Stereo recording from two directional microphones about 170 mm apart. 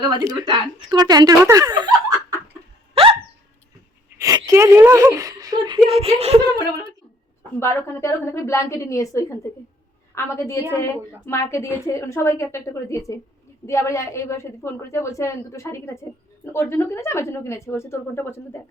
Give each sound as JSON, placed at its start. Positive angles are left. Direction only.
{"t": 0.0, "sound": "speech", "side_deg": -25}
{"t": 2.9, "sound": "hiccup", "side_deg": -35}
{"t": 4.2, "sound": "speech", "side_deg": -20}
{"t": 7.6, "sound": "a woman's voice", "side_deg": 15}